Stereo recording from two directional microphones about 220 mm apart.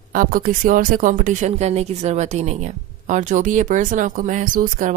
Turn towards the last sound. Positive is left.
turn(degrees=-40)  # may be behind; listen again after turning